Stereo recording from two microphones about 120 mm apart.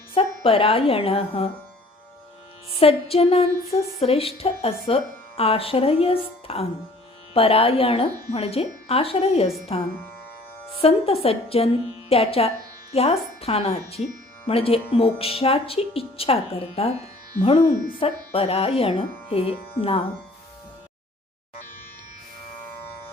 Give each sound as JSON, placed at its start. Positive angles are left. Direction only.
{"t": 0.1, "sound": "a woman's voice", "side_deg": 50}
{"t": 2.7, "sound": "speech", "side_deg": 55}